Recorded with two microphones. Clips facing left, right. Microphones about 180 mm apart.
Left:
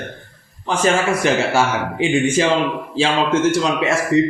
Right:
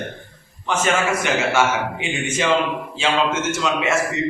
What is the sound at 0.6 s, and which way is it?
A man's voice, 35° left (ahead or behind).